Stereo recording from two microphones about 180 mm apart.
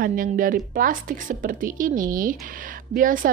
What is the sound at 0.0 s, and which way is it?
A woman's voice, 50° right (ahead or behind).